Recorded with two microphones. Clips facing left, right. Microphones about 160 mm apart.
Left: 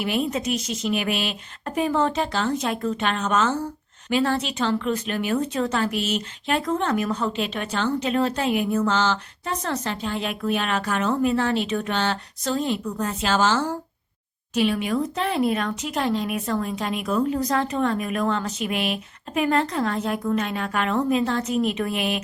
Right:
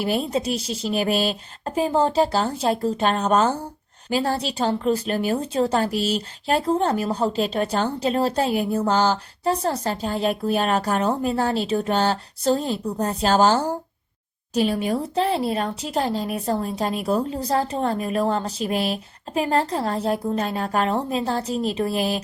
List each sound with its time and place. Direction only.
0.0 s speech: 35° right (ahead or behind)